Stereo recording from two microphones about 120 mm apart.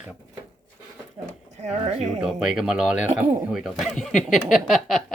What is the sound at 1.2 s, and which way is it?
Speech, 35° right (ahead or behind).